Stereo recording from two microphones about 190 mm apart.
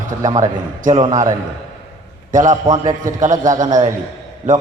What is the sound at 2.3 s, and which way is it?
Speech, 45° right (ahead or behind).